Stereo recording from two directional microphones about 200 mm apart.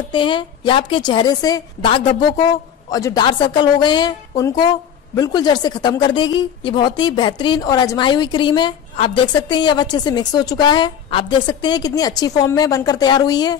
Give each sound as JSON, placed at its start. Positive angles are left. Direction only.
{"t": 0.1, "sound": "a woman's voice", "side_deg": 25}